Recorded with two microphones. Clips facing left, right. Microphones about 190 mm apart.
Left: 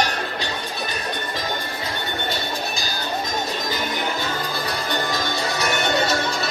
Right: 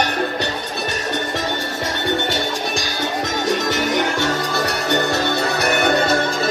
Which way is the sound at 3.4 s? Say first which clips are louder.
Right 7 dB; 85° right.